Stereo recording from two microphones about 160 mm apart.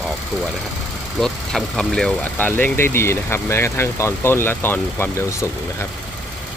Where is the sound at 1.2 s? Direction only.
5° left (ahead or behind).